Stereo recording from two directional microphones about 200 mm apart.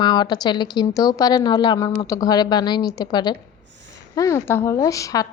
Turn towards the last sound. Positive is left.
turn(degrees=15)  # may be behind; listen again after turning